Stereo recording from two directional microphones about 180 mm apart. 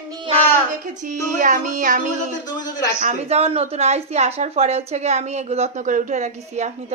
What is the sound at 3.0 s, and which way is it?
A woman's voice, 40° right (ahead or behind).